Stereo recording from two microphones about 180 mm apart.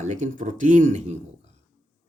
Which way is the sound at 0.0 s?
40° right (ahead or behind).